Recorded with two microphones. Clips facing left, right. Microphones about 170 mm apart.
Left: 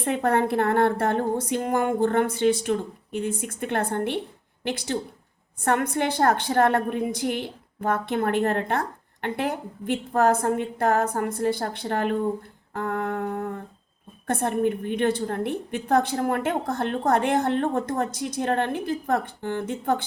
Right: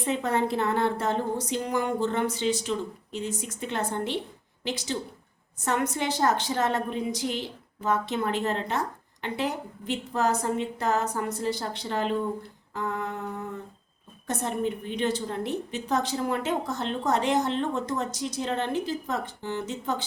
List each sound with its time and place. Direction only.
0.0 s a woman's voice: 55° left (ahead or behind)
12.7 s humming: 55° left (ahead or behind)
14.3 s a woman's voice: 55° left (ahead or behind)